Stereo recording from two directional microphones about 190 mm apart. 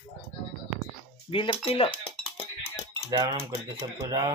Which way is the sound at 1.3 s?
30° left (ahead or behind).